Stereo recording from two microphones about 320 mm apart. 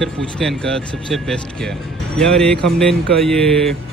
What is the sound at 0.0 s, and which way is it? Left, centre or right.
Speech, centre.